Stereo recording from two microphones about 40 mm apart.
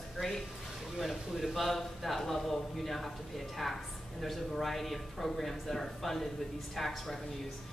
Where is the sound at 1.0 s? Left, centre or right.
Centre.